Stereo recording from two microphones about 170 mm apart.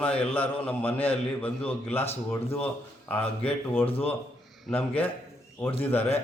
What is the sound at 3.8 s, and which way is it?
Speech, 35° left (ahead or behind).